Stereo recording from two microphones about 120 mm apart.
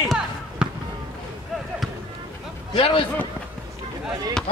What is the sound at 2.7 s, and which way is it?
Speech, 45° left (ahead or behind).